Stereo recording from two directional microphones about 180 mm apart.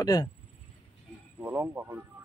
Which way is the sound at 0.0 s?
20° left (ahead or behind).